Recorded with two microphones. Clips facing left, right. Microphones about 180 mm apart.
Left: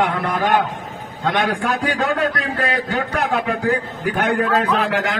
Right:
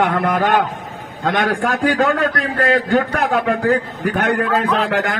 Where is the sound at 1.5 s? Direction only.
50° right (ahead or behind).